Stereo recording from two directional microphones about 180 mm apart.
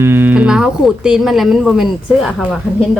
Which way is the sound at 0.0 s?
10° right (ahead or behind).